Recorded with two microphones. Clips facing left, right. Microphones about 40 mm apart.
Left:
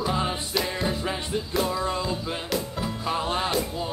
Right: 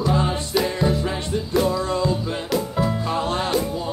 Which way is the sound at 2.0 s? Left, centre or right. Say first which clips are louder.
Right 6 dB; centre.